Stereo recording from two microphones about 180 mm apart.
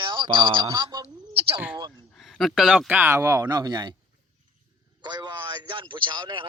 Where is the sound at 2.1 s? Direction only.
Centre (ahead or behind); by 3.9 s 25° right (ahead or behind).